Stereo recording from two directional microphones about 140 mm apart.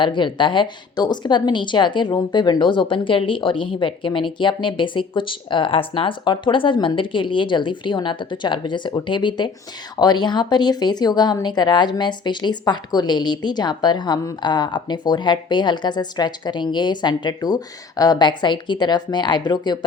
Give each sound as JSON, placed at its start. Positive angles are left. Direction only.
{"t": 0.0, "sound": "speech", "side_deg": 35}